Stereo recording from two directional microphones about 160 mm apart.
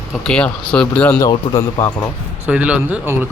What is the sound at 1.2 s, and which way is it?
Speech, 20° left (ahead or behind).